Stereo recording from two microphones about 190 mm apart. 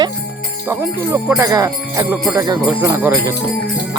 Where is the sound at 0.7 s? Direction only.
15° right (ahead or behind).